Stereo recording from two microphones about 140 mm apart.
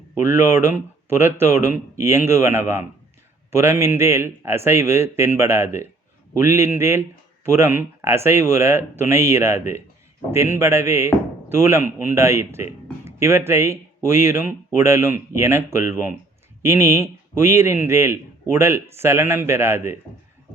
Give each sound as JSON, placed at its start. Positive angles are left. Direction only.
{"t": 0.1, "sound": "speech", "side_deg": -15}